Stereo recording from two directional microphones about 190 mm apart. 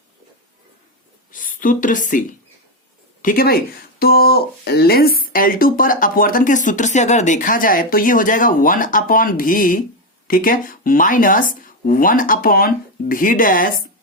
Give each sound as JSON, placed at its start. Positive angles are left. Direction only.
{"t": 1.3, "sound": "a woman's voice", "side_deg": 45}